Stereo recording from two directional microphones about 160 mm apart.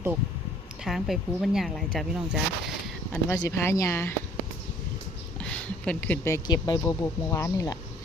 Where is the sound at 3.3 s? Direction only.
20° left (ahead or behind).